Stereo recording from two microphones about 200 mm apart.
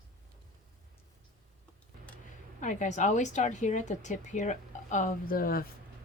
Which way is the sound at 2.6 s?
40° left (ahead or behind).